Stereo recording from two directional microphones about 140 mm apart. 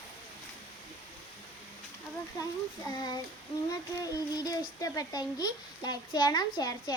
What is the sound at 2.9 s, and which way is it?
Speech, 30° left (ahead or behind).